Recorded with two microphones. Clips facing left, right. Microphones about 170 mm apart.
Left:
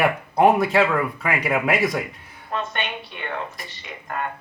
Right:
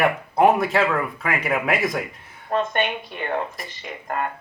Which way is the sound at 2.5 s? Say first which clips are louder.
Right 6 dB; 50° right (ahead or behind).